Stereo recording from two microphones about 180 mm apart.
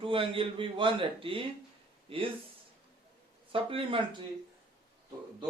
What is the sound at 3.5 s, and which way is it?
Speech, 30° right (ahead or behind).